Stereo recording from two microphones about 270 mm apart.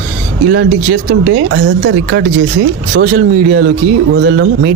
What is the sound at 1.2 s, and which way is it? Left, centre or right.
Speech, right.